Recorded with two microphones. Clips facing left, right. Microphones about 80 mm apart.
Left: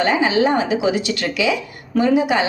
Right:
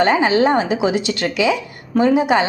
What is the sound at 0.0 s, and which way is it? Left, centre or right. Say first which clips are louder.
A woman's voice: right 2 dB; right.